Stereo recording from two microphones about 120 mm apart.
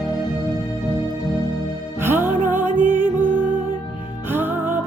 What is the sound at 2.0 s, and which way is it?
Music, 20° right (ahead or behind).